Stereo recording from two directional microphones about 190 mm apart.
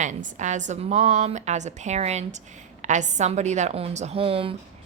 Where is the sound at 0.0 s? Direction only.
40° right (ahead or behind).